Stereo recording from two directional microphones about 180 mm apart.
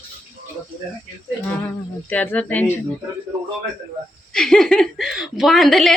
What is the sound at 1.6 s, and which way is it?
Speech, 10° left (ahead or behind).